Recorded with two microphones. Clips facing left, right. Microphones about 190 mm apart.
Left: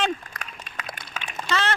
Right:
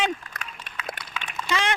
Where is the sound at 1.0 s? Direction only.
50° left (ahead or behind).